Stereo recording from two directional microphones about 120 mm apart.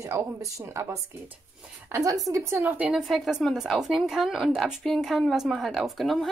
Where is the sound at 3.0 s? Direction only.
Centre (ahead or behind).